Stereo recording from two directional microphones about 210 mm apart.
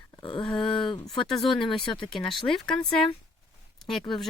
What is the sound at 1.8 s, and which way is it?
Speech, 20° left (ahead or behind).